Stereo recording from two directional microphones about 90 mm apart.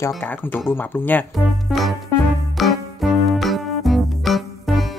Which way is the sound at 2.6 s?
Centre (ahead or behind).